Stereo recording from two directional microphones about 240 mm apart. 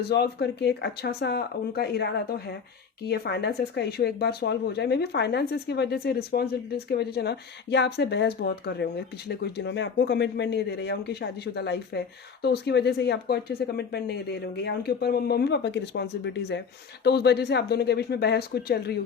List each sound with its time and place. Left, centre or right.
0.0 s speech: left